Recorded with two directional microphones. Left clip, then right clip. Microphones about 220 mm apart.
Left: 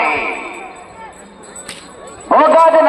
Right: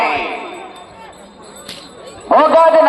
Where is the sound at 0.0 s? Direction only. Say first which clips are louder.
Left 1 dB; 40° right (ahead or behind).